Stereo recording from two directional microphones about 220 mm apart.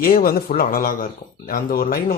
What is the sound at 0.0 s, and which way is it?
Speech, 40° left (ahead or behind).